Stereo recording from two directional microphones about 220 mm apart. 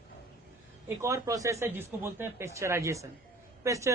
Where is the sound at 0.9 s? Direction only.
15° right (ahead or behind).